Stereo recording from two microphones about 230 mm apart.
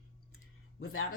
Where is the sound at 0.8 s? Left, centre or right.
Left.